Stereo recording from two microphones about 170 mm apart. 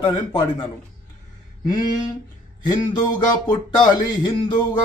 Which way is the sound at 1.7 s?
25° left (ahead or behind).